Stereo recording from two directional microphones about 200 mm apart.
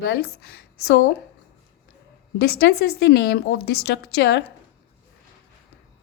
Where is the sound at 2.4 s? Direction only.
50° left (ahead or behind).